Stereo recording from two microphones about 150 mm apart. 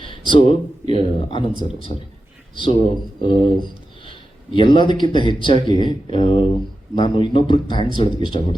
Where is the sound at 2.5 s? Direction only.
35° left (ahead or behind).